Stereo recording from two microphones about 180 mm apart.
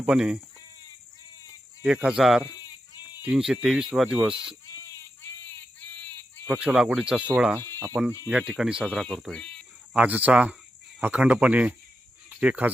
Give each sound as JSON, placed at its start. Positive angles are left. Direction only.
{"t": 0.0, "sound": "speech", "side_deg": -5}
{"t": 1.8, "sound": "speech", "side_deg": -5}
{"t": 2.6, "sound": "sheep", "side_deg": 20}
{"t": 3.2, "sound": "speech", "side_deg": -5}
{"t": 6.5, "sound": "speech", "side_deg": -5}
{"t": 8.3, "sound": "speech", "side_deg": -5}
{"t": 9.9, "sound": "speech", "side_deg": -10}